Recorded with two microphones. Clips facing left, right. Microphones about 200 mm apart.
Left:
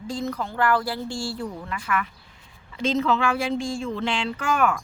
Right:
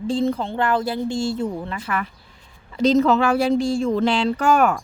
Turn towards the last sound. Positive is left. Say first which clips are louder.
# right 6 dB
turn(degrees=-40)  # may be behind; listen again after turning